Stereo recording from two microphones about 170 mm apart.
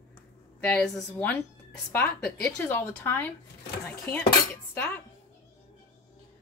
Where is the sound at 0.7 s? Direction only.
5° left (ahead or behind).